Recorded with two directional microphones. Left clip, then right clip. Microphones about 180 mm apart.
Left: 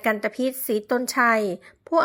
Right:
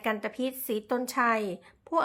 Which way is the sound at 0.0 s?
30° left (ahead or behind).